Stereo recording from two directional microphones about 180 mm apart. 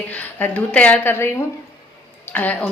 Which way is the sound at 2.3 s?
10° left (ahead or behind).